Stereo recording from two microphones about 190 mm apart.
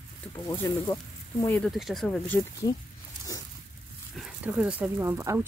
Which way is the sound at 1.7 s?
Centre (ahead or behind).